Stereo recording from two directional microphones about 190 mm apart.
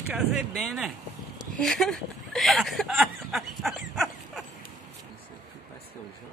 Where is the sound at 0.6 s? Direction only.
Centre (ahead or behind).